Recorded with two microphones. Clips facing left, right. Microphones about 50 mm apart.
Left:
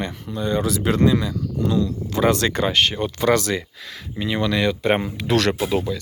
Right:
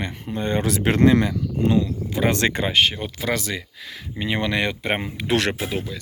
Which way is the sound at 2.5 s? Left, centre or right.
Centre.